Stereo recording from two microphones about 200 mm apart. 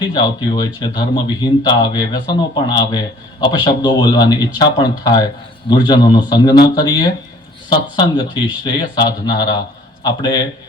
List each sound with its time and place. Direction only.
0.0 s speech: 20° left (ahead or behind)